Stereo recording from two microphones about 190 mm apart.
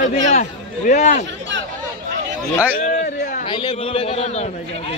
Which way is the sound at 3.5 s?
25° left (ahead or behind).